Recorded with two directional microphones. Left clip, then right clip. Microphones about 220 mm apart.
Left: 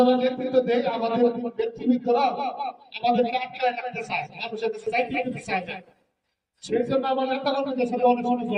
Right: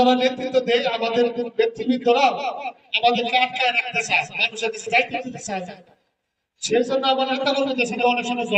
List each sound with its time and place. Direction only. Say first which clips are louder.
0.0 s a man's voice: right 3 dB; 45° left (ahead or behind)